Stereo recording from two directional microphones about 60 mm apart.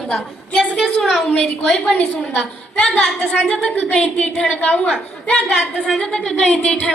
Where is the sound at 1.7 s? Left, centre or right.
Centre.